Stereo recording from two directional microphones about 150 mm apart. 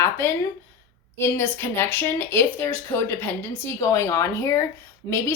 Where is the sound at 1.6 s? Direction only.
15° left (ahead or behind).